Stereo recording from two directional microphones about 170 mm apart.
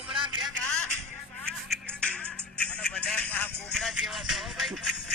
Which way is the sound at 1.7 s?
5° left (ahead or behind).